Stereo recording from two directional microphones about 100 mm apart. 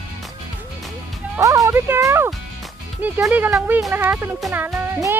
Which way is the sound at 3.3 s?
20° right (ahead or behind).